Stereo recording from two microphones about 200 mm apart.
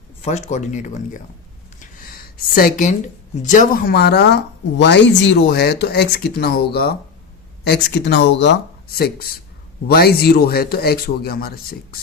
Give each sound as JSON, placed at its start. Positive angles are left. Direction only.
{"t": 0.2, "sound": "speech", "side_deg": 35}
{"t": 1.8, "sound": "a sound", "side_deg": 45}
{"t": 3.3, "sound": "speech", "side_deg": 40}